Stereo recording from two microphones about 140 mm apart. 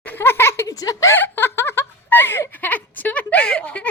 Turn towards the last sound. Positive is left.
turn(degrees=10)  # may be behind; listen again after turning